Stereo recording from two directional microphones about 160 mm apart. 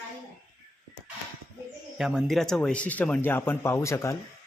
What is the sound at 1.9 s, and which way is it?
A man's voice, centre (ahead or behind).